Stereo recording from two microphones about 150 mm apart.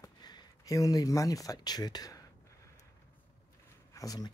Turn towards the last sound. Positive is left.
turn(degrees=25)  # may be behind; listen again after turning